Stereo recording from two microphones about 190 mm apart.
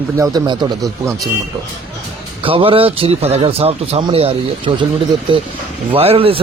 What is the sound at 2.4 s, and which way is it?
Speech, 30° right (ahead or behind).